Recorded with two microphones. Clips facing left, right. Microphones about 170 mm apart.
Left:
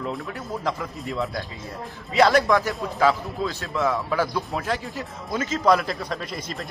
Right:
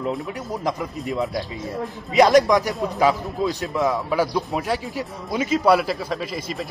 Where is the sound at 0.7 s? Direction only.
15° right (ahead or behind).